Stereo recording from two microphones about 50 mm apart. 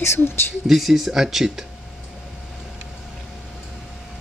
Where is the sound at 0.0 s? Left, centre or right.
Left.